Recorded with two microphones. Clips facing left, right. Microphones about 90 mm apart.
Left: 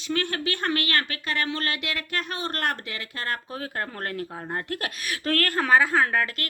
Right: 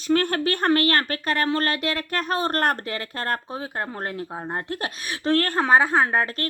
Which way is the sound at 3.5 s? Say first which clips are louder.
Right 2 dB; 20° right (ahead or behind).